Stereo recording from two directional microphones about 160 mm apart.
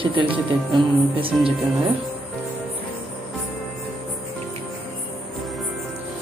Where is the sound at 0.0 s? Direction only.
30° right (ahead or behind).